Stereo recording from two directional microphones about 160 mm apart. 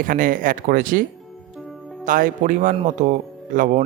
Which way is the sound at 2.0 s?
55° right (ahead or behind).